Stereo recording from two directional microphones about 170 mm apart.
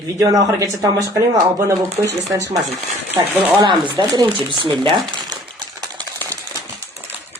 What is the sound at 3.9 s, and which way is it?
Speech, 25° right (ahead or behind).